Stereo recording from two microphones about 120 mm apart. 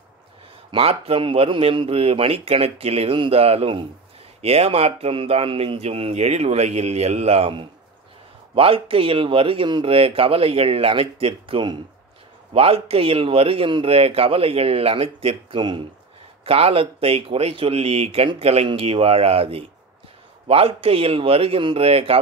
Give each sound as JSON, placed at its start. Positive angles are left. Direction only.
{"t": 0.7, "sound": "speech", "side_deg": -55}
{"t": 16.4, "sound": "speech", "side_deg": -55}